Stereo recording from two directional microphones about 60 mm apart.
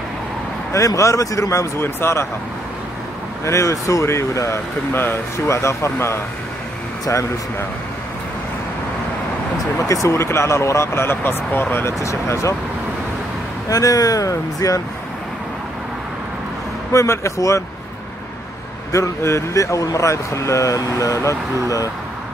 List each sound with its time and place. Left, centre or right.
0.7 s speech: left
1.8 s speech: left
3.4 s speech: left
4.9 s speech: left
5.5 s speech: left
9.8 s speech: left
12.0 s speech: left
13.7 s speech: left
16.9 s speech: left
18.9 s speech: left